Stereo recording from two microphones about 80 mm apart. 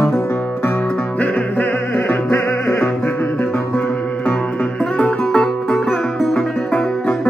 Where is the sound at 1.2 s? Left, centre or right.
Left; by 6.4 s centre.